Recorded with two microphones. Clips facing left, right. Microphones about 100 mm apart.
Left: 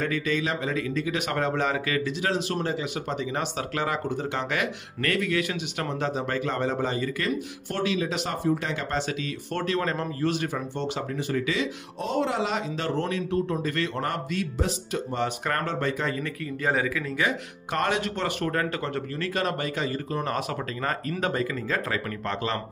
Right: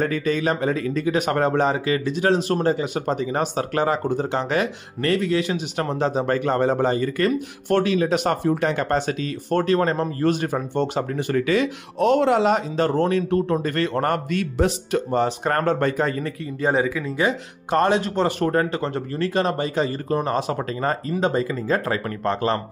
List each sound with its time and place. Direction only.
0.0 s speech: 40° right (ahead or behind)
1.7 s speech: 30° right (ahead or behind); by 11.7 s 55° right (ahead or behind)
12.0 s speech: 70° right (ahead or behind)
15.1 s speech: 35° right (ahead or behind)
15.6 s speech: 45° right (ahead or behind)
16.6 s speech: 25° right (ahead or behind)